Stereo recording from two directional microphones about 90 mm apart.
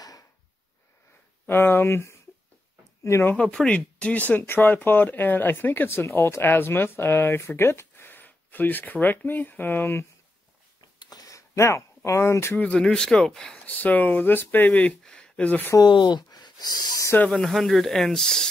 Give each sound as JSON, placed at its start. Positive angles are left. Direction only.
{"t": 0.0, "sound": "drawer open or close", "side_deg": 40}
{"t": 1.5, "sound": "speech", "side_deg": 25}
{"t": 3.3, "sound": "speech", "side_deg": 10}
{"t": 11.0, "sound": "a sound", "side_deg": 45}
{"t": 12.5, "sound": "speech", "side_deg": 10}
{"t": 13.7, "sound": "speech", "side_deg": 20}
{"t": 15.8, "sound": "speech", "side_deg": 55}
{"t": 17.3, "sound": "speech", "side_deg": 5}